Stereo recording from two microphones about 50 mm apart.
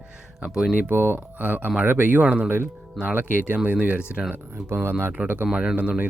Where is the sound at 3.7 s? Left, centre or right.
Right.